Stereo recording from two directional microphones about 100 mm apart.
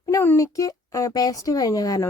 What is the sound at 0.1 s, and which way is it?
Speech, 30° left (ahead or behind).